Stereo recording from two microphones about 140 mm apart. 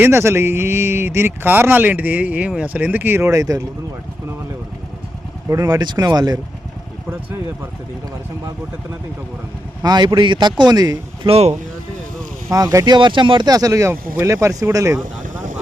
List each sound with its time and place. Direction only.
0.0 s speech: 20° right (ahead or behind)
5.5 s speech: 25° right (ahead or behind)
9.8 s speech: 30° right (ahead or behind)
11.3 s speech: 45° right (ahead or behind)
12.5 s speech: 25° right (ahead or behind)
15.2 s vehicle: 65° right (ahead or behind)